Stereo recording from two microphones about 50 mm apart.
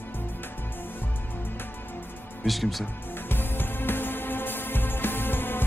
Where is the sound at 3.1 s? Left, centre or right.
Left.